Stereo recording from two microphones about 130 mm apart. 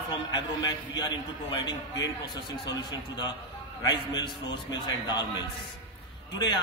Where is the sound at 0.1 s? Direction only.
35° left (ahead or behind).